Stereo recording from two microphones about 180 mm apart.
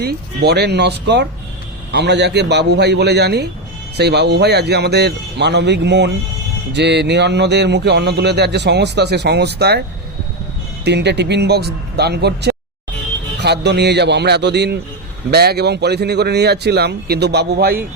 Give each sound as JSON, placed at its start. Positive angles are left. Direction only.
{"t": 0.0, "sound": "speech", "side_deg": -65}
{"t": 10.8, "sound": "speech", "side_deg": -70}